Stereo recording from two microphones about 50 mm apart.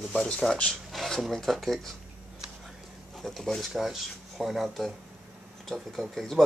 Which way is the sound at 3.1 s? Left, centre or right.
Centre.